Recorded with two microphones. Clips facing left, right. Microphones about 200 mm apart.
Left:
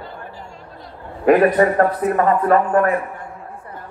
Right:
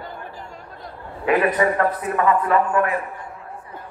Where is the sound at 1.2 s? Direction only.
45° left (ahead or behind).